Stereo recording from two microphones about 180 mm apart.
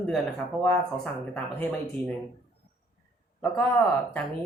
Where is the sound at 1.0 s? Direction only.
10° left (ahead or behind).